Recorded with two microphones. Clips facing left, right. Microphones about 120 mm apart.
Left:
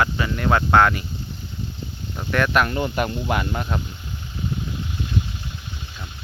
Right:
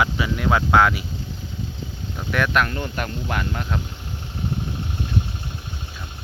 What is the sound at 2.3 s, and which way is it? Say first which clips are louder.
Speech: left 2 dB; centre (ahead or behind).